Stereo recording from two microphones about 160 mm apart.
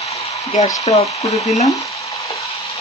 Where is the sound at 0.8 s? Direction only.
40° left (ahead or behind).